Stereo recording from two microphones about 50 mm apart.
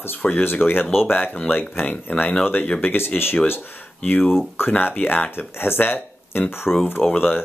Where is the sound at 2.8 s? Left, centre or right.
Left.